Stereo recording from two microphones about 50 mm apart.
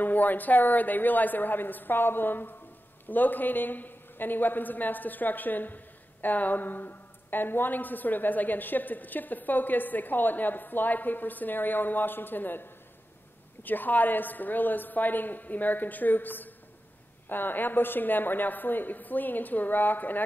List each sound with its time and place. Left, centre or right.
0.0 s a woman's voice: left